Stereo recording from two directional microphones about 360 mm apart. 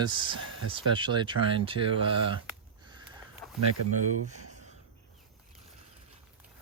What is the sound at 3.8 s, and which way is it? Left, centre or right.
Speech, right.